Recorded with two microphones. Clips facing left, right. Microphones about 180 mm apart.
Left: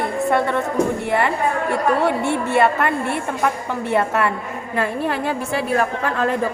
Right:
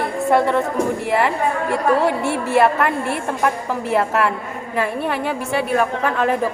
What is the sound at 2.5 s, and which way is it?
Speech, centre (ahead or behind).